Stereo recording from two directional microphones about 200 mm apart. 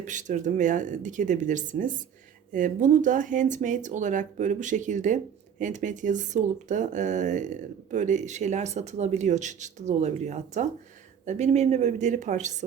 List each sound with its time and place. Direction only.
0.0 s speech: 40° right (ahead or behind)